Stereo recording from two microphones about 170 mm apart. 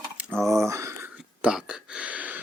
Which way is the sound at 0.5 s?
15° right (ahead or behind).